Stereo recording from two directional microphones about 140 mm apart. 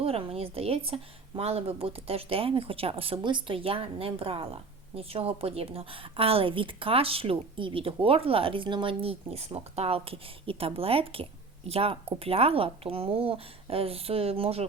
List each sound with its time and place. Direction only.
0.0 s speech: 45° right (ahead or behind)